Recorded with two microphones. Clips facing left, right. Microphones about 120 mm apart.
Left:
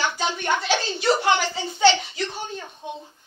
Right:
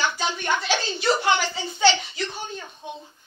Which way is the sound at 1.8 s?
55° left (ahead or behind).